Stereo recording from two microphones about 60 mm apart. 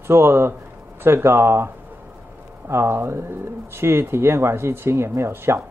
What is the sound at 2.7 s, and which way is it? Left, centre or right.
Speech, right.